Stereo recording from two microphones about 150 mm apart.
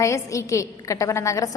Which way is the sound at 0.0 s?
20° left (ahead or behind).